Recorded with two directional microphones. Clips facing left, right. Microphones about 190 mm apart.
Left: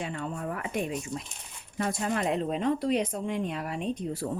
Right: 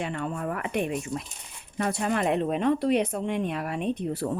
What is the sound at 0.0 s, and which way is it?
Speech, 65° right (ahead or behind).